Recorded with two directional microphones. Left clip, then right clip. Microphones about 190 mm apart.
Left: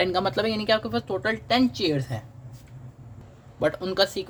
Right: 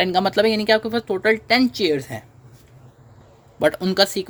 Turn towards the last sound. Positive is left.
turn(degrees=-45)  # may be behind; listen again after turning